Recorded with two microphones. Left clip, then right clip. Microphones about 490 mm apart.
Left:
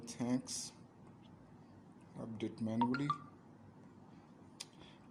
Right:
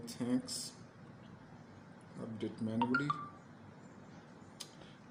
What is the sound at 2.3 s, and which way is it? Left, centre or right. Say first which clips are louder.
Speech: right 1 dB; left.